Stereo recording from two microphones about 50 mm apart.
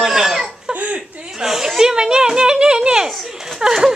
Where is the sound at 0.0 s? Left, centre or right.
Centre.